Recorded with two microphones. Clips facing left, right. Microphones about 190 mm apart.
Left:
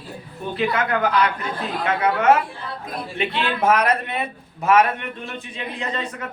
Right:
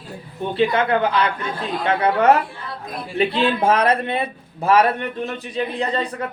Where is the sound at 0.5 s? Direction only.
30° right (ahead or behind).